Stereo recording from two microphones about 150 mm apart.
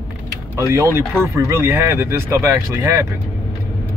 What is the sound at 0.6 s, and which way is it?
A man's voice, 20° right (ahead or behind).